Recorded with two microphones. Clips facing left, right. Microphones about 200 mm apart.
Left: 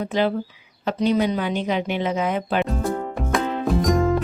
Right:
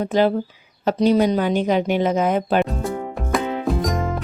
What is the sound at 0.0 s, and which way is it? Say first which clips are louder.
Speech: right 4 dB; 40° right (ahead or behind).